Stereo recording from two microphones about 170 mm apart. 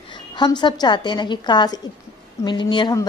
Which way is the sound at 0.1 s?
25° left (ahead or behind).